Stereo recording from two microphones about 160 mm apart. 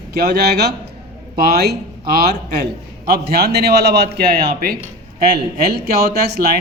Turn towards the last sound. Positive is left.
turn(degrees=-75)  # may be behind; listen again after turning